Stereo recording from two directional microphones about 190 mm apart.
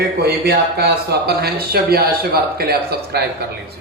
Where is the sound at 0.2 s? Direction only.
55° right (ahead or behind).